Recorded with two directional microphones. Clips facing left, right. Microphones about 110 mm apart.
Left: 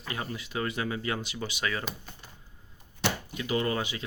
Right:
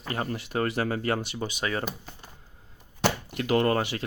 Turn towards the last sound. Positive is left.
turn(degrees=-60)  # may be behind; listen again after turning